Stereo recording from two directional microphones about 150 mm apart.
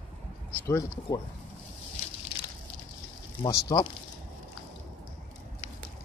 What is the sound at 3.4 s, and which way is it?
Speech, 30° left (ahead or behind).